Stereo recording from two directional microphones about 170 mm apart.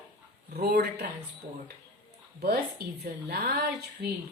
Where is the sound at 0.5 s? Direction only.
70° right (ahead or behind).